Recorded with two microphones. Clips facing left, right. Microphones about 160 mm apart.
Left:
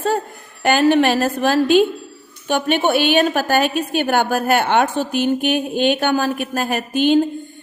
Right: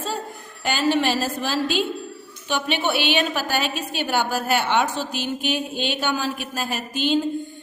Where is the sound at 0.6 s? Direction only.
55° left (ahead or behind).